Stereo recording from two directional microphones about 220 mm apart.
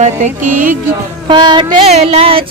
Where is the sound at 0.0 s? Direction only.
35° right (ahead or behind).